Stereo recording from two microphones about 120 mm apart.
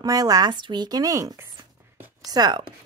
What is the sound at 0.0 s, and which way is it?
Speech, 30° right (ahead or behind).